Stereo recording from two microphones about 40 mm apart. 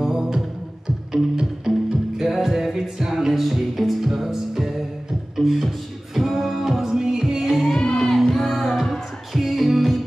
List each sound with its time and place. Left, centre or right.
0.0 s music: centre
1.7 s music: centre
7.6 s music: centre
8.3 s music: centre